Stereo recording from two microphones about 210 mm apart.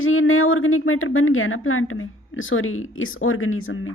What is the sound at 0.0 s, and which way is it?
A woman's voice, 75° left (ahead or behind).